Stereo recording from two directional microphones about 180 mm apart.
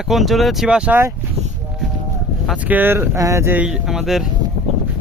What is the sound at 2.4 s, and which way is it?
Speech, 5° right (ahead or behind).